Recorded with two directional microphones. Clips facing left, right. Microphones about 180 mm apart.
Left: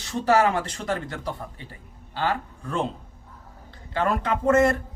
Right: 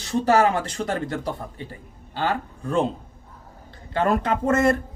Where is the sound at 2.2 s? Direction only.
45° right (ahead or behind).